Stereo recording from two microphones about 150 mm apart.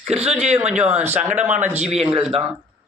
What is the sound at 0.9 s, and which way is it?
Speech, 10° right (ahead or behind).